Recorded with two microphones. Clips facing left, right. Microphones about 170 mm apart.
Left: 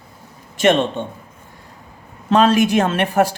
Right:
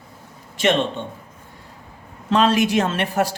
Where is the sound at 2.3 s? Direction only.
45° left (ahead or behind).